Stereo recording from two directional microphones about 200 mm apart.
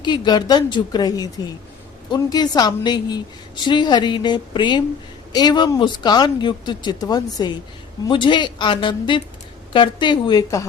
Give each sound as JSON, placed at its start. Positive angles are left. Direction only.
{"t": 0.0, "sound": "a woman's voice", "side_deg": 20}